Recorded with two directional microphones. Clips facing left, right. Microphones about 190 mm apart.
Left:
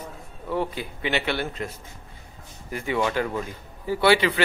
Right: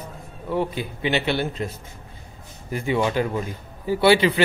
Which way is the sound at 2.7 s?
25° right (ahead or behind).